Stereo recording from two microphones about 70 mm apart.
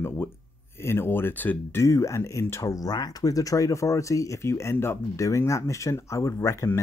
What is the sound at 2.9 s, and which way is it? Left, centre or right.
Speech, left.